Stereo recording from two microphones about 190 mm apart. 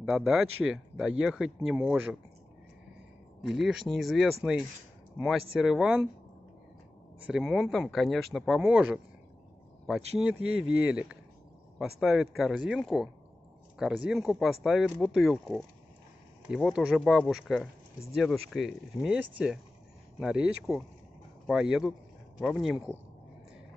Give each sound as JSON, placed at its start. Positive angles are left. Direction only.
{"t": 0.0, "sound": "speech", "side_deg": 0}
{"t": 3.4, "sound": "speech", "side_deg": 0}
{"t": 5.6, "sound": "speech", "side_deg": -5}
{"t": 7.2, "sound": "speech", "side_deg": 0}